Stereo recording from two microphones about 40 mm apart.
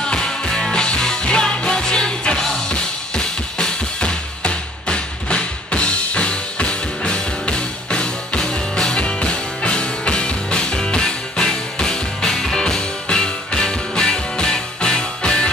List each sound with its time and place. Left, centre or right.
0.0 s music: centre
2.7 s drum kit: left
4.4 s drum: left
7.5 s music: left